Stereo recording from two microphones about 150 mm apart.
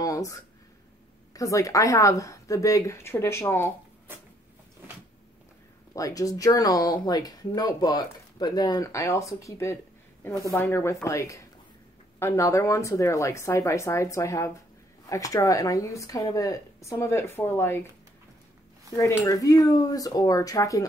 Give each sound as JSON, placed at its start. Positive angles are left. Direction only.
{"t": 0.0, "sound": "a sound", "side_deg": 20}
{"t": 1.3, "sound": "speech", "side_deg": 20}
{"t": 5.9, "sound": "speech", "side_deg": 25}
{"t": 18.9, "sound": "speech", "side_deg": 20}